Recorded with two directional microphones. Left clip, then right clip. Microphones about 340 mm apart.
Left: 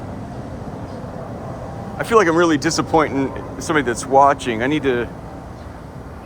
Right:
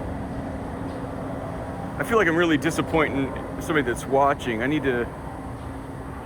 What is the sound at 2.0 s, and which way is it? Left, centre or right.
Speech, centre.